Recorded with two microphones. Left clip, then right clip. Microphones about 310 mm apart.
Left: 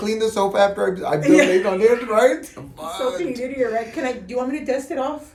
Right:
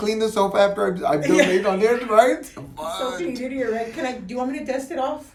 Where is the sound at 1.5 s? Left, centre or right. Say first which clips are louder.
Left 2 dB; centre.